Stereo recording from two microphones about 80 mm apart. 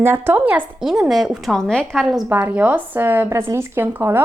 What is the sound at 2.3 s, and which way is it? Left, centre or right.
A woman's voice, right.